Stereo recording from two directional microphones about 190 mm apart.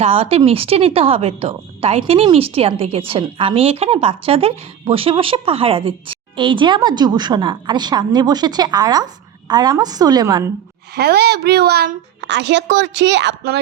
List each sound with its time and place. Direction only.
0.0 s a woman's voice: 30° right (ahead or behind)
10.9 s a woman's voice: 60° right (ahead or behind)